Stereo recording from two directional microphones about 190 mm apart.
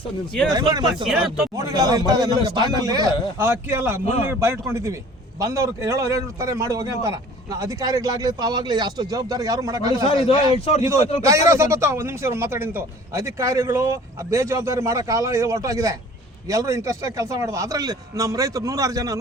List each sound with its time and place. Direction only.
0.5 s a man's voice: 20° right (ahead or behind)
1.0 s speech: 5° right (ahead or behind)
1.5 s a man's voice: 20° right (ahead or behind)
4.0 s a man's voice: 35° left (ahead or behind)
4.3 s speech: 15° right (ahead or behind)
10.5 s a man's voice: 35° left (ahead or behind)
11.2 s speech: 15° right (ahead or behind)